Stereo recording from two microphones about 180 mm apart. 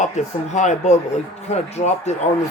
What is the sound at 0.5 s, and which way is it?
Speech, 40° left (ahead or behind).